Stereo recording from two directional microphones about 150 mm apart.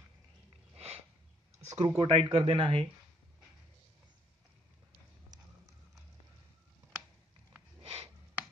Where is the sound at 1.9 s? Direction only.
40° right (ahead or behind).